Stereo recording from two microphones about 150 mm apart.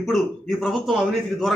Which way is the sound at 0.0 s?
Centre (ahead or behind).